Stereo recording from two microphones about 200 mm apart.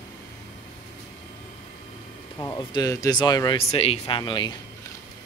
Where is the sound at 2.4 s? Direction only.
15° left (ahead or behind).